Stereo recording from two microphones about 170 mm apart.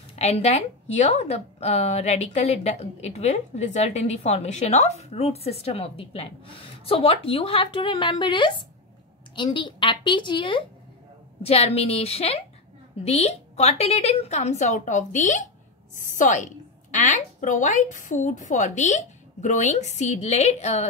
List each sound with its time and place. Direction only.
0.1 s a woman's voice: 40° left (ahead or behind)